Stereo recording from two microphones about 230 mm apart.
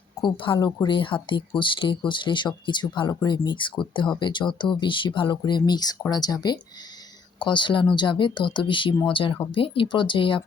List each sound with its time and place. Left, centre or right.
0.3 s speech: left